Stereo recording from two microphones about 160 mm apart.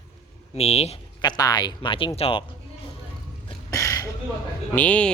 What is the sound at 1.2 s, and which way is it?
Speech, 25° left (ahead or behind).